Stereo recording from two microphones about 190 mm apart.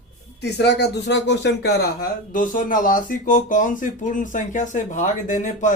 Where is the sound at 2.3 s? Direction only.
45° left (ahead or behind).